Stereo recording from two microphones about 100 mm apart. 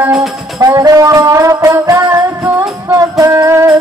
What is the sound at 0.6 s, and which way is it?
Music, 35° right (ahead or behind).